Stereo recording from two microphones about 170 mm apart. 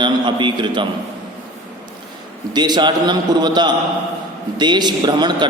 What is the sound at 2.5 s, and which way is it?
A man's voice, 25° right (ahead or behind).